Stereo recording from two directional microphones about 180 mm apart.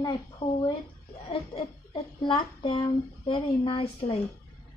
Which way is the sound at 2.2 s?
30° left (ahead or behind).